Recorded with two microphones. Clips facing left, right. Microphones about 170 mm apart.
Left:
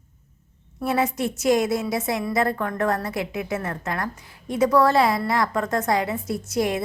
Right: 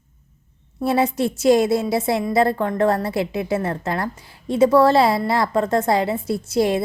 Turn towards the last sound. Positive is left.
turn(degrees=-30)  # may be behind; listen again after turning